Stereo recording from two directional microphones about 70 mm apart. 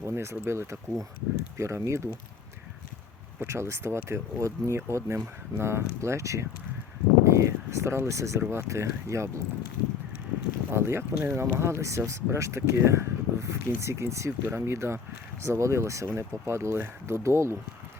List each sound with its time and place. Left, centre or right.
0.0 s speech: right
3.4 s speech: right
10.7 s speech: right